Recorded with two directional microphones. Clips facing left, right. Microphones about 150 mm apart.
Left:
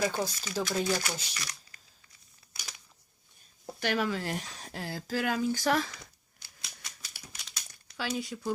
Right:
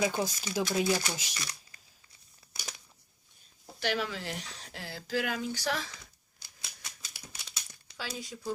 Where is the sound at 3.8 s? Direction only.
50° left (ahead or behind).